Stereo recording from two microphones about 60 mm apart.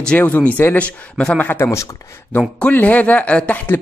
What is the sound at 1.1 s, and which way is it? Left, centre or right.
Speech, centre.